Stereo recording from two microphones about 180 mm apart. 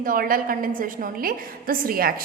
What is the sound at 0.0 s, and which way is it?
A woman's voice, 50° right (ahead or behind).